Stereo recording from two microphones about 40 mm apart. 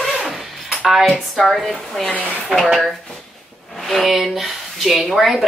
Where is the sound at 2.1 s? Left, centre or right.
Left.